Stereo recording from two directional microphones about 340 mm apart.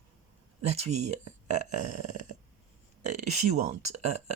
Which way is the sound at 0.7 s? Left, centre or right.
Centre.